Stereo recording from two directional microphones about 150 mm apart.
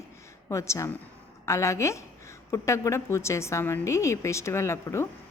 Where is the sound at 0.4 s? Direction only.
20° left (ahead or behind).